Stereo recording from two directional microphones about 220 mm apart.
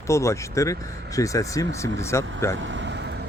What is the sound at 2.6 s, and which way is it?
Vehicle, 55° right (ahead or behind).